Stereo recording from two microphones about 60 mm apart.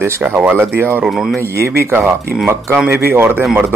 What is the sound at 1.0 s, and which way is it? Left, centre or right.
Speech, centre.